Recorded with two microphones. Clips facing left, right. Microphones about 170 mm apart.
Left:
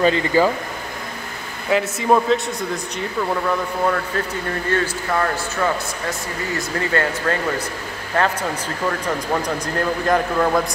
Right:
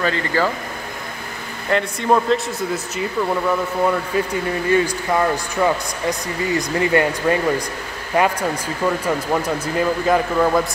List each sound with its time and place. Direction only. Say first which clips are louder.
0.0 s speech: left 4 dB; 15° left (ahead or behind)
1.7 s a man's voice: left 1 dB; 5° left (ahead or behind)